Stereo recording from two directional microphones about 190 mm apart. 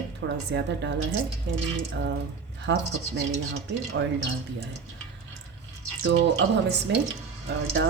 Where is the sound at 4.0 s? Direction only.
90° right.